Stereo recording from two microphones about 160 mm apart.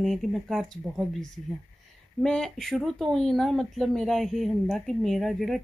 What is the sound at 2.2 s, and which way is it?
Speech, 5° left (ahead or behind).